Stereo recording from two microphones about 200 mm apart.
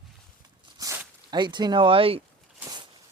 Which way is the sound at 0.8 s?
15° right (ahead or behind).